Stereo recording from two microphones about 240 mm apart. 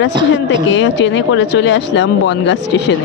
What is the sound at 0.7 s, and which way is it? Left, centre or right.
Speech, left.